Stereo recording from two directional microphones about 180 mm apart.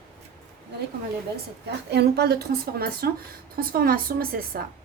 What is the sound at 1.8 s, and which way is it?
A woman's voice, 65° right (ahead or behind).